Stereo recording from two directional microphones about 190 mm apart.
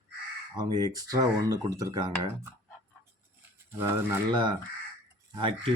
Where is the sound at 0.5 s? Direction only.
20° right (ahead or behind).